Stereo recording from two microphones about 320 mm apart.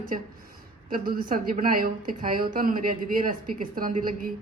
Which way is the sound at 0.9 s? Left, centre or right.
Right.